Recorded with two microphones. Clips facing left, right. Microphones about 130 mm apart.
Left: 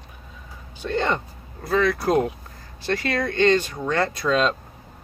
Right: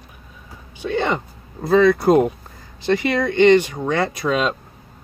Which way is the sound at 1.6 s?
20° right (ahead or behind).